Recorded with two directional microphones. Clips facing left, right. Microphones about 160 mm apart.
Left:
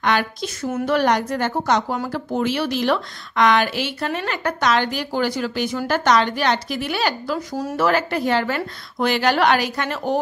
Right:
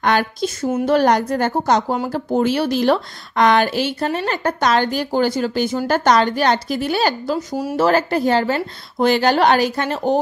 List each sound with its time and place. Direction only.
0.0 s speech: 45° right (ahead or behind)
7.3 s speech: 10° right (ahead or behind)
7.7 s speech: 35° right (ahead or behind)